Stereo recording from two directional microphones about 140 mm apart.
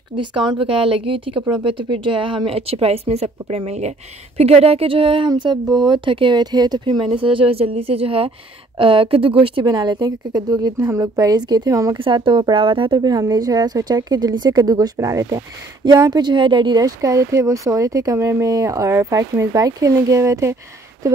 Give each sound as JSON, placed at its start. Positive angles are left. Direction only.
{"t": 0.1, "sound": "speech", "side_deg": -35}
{"t": 12.0, "sound": "a woman's voice", "side_deg": -35}